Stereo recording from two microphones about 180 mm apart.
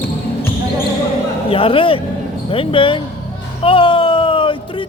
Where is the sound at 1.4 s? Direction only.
30° left (ahead or behind).